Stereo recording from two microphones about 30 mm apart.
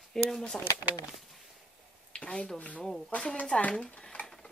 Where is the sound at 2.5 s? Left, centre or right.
Left.